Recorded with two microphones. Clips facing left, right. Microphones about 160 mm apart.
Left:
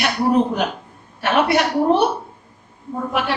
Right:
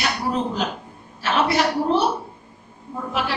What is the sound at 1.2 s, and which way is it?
Speech, 60° left (ahead or behind).